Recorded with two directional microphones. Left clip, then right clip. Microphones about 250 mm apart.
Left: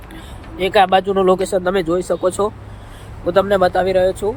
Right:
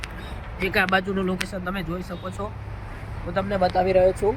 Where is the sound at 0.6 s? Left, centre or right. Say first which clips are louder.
Left 9 dB; centre.